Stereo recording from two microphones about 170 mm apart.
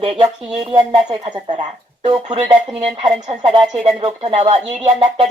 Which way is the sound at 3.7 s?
35° right (ahead or behind).